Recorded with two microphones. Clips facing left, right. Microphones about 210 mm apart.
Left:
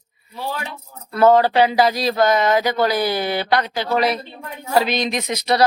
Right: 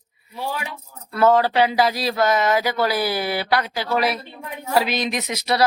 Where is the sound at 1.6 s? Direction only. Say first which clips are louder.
Left 3 dB; centre (ahead or behind).